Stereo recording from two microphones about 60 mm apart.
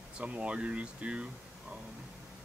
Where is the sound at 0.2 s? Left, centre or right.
Right.